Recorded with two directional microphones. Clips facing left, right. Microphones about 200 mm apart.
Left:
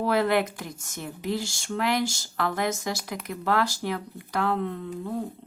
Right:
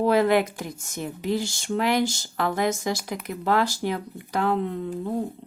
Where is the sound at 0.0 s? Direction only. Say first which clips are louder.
Right 4 dB; 15° right (ahead or behind).